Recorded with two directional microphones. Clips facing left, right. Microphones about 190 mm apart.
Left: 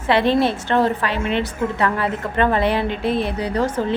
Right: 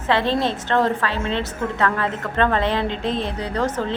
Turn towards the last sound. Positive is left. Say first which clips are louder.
# left 3 dB
turn(degrees=10)  # may be behind; listen again after turning